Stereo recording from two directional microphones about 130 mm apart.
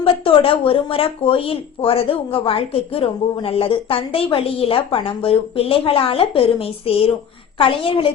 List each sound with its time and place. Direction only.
0.0 s a woman's voice: 45° left (ahead or behind)